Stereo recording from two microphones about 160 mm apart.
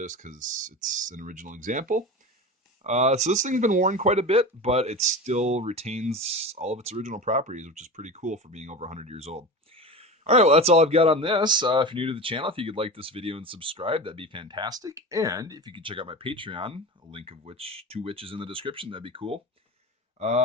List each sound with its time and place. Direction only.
0.0 s speech: 50° right (ahead or behind)
2.8 s speech: 45° right (ahead or behind)